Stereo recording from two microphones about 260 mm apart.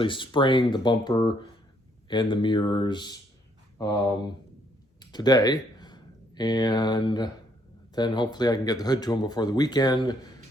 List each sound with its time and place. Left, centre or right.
0.0 s speech: centre
5.1 s speech: centre